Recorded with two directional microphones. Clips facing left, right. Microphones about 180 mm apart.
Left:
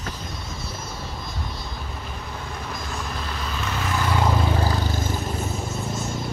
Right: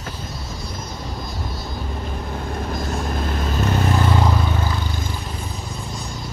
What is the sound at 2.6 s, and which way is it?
Vehicle, 45° right (ahead or behind).